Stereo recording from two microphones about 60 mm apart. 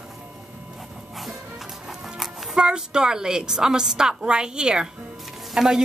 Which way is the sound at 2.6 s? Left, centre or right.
Centre.